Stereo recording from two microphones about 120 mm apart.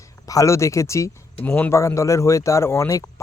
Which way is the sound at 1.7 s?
25° left (ahead or behind).